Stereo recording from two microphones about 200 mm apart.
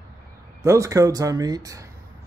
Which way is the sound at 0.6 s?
15° right (ahead or behind).